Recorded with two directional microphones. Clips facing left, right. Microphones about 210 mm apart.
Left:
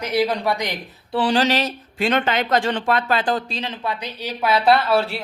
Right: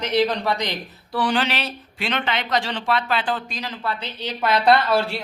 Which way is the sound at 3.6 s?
20° left (ahead or behind).